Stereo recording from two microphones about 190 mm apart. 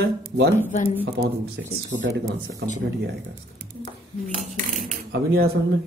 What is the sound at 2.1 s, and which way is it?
Speech, 65° right (ahead or behind).